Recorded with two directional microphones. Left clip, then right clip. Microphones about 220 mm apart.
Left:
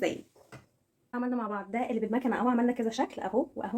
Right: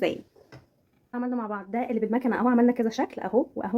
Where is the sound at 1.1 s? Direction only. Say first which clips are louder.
Right 2 dB; 15° right (ahead or behind); by 3.7 s 40° right (ahead or behind).